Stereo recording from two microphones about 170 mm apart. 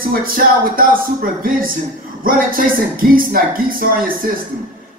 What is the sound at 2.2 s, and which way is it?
Speech, 55° right (ahead or behind).